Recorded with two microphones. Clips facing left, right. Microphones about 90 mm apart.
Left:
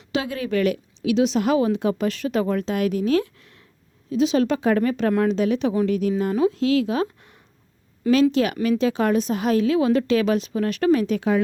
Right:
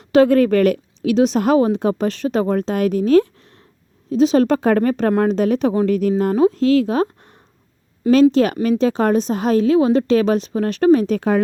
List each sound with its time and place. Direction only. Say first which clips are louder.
0.1 s a woman's voice: right 12 dB; 50° right (ahead or behind)